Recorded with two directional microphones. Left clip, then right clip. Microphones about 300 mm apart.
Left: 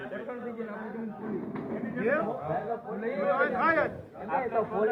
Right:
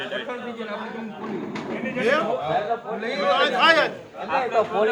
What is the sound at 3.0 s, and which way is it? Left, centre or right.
Speech, centre.